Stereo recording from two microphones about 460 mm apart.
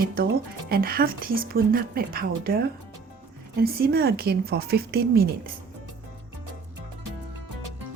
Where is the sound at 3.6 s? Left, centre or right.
Centre.